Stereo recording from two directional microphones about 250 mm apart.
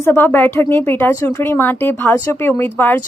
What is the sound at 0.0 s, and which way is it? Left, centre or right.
Speech, centre.